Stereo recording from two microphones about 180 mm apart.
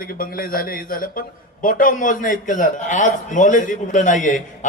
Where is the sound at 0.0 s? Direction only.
55° left (ahead or behind).